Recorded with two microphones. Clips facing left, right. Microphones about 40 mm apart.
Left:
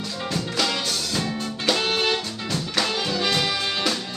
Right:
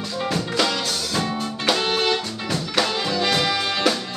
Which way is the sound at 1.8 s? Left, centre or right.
Centre.